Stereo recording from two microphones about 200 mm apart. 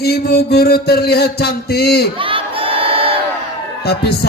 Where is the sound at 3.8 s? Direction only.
55° left (ahead or behind).